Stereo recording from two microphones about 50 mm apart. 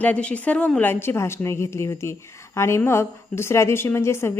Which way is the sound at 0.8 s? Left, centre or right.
Left.